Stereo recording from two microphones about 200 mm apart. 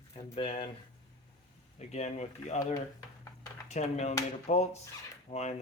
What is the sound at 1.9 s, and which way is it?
Speech, 35° left (ahead or behind).